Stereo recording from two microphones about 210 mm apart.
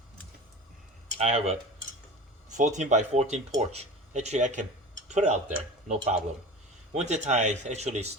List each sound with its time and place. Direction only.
1.2 s speech: 30° right (ahead or behind)
6.9 s speech: 35° right (ahead or behind)